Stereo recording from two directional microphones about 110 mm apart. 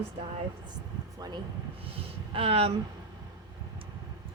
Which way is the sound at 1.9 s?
55° right (ahead or behind).